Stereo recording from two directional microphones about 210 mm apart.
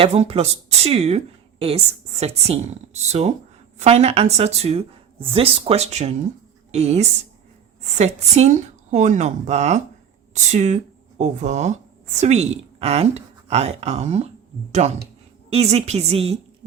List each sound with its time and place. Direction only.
0.0 s a woman's voice: 30° right (ahead or behind)